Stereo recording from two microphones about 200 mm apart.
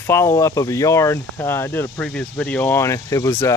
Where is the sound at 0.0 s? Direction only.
15° left (ahead or behind).